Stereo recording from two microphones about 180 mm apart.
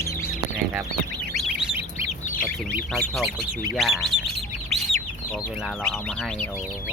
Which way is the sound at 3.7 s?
Centre (ahead or behind).